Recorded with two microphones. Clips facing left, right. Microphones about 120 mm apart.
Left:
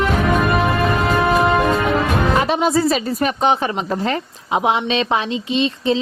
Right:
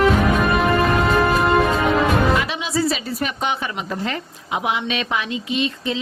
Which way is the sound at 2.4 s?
45° left (ahead or behind).